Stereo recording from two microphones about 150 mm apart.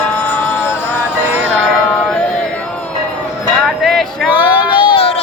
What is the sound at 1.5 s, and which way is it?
Music, 10° left (ahead or behind).